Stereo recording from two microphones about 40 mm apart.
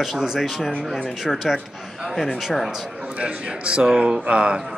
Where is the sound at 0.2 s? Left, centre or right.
Centre.